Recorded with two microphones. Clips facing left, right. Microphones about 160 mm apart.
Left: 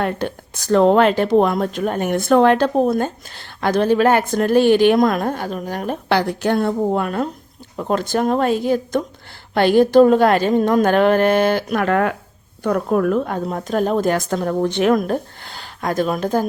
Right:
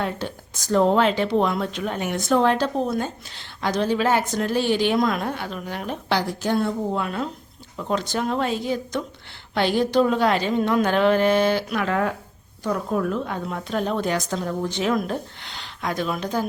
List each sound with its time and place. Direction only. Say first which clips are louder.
0.0 s speech: left 6 dB; 60° left (ahead or behind)